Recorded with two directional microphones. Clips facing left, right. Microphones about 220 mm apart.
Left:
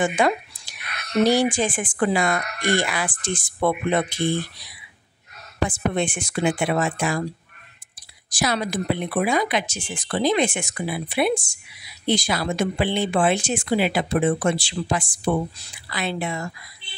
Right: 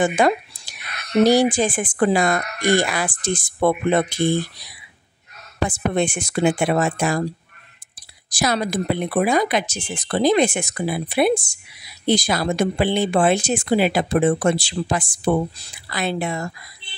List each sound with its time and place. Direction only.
0.0 s a sound: 40° right (ahead or behind)
1.2 s speech: 40° right (ahead or behind)
5.7 s speech: 40° right (ahead or behind)
8.3 s speech: 40° right (ahead or behind)